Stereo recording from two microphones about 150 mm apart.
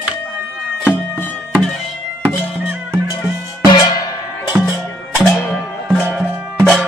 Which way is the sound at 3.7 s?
25° left (ahead or behind).